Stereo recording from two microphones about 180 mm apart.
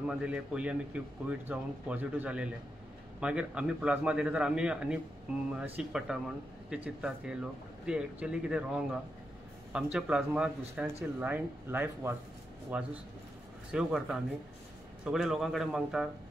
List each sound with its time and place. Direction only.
0.1 s a man's voice: 5° right (ahead or behind)